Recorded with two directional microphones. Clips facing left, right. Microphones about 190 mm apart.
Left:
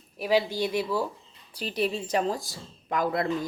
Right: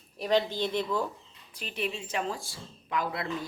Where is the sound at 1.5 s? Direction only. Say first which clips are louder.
Left 6 dB; 35° left (ahead or behind).